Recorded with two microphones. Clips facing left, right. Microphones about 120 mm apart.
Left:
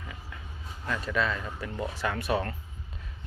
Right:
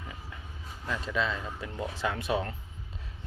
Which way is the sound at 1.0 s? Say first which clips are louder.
Left 2 dB; 20° right (ahead or behind).